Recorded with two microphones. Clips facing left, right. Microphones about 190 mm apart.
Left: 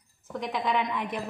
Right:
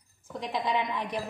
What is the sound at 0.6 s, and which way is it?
Speech, 20° right (ahead or behind).